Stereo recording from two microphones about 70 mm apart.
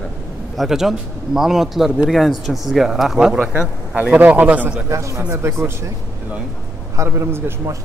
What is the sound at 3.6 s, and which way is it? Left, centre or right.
A man's voice, centre.